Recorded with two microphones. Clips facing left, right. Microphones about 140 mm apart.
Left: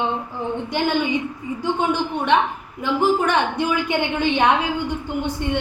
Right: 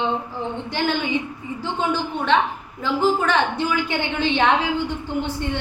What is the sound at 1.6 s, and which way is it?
A woman's voice, 15° left (ahead or behind).